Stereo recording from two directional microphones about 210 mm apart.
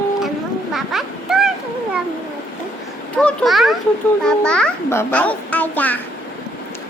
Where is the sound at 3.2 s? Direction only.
5° left (ahead or behind).